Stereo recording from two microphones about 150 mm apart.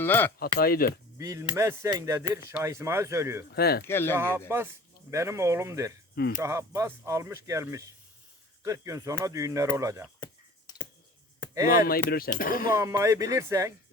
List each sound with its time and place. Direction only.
0.0 s speech: 15° left (ahead or behind)
0.6 s speech: 85° left
1.2 s speech: 20° right (ahead or behind)
3.5 s speech: 90° left
3.8 s speech: 15° left (ahead or behind)
4.2 s speech: 15° right (ahead or behind)
6.1 s speech: 90° left
6.4 s speech: 20° right (ahead or behind)
10.7 s clicking: 25° left (ahead or behind)
12.0 s speech: 80° left
12.7 s speech: 20° right (ahead or behind)